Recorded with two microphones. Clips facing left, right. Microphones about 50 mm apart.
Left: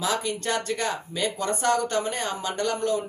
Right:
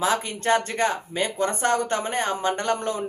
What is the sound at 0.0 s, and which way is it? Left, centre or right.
Speech, right.